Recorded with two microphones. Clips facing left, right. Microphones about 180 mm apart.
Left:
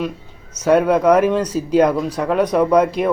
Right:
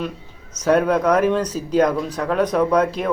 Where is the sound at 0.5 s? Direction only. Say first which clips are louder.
Left 3 dB; 10° left (ahead or behind).